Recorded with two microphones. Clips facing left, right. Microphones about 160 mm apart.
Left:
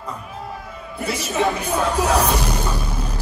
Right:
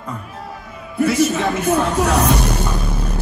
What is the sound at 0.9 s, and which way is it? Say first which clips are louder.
Speech: right 7 dB; 60° right (ahead or behind).